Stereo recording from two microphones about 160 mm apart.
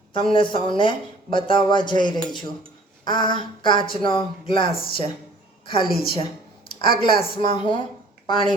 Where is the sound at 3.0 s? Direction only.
30° left (ahead or behind).